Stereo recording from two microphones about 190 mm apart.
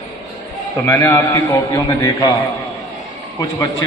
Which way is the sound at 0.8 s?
15° left (ahead or behind).